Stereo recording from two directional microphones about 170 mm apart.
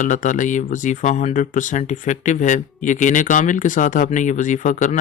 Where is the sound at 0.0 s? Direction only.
45° left (ahead or behind).